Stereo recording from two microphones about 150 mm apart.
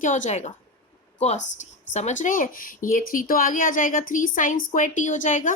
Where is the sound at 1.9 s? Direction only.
50° left (ahead or behind).